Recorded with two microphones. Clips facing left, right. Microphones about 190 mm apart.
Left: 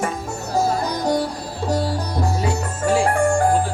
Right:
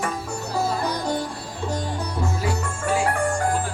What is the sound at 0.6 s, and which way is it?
Music, 40° left (ahead or behind).